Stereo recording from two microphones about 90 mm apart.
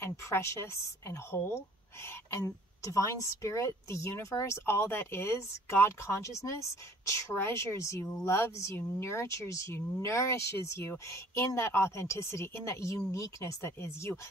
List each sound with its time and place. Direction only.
0.0 s a woman's voice: 30° left (ahead or behind)